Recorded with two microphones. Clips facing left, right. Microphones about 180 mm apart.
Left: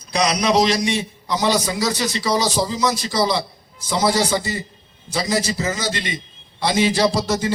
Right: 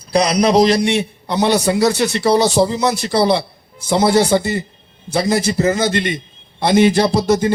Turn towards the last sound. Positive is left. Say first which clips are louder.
# right 4 dB
turn(degrees=-55)  # may be behind; listen again after turning